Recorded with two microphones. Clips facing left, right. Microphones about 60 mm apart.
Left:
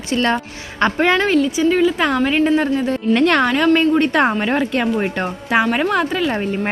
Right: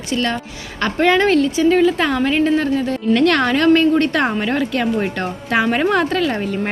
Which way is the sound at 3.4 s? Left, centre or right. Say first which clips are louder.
Right 1 dB; centre.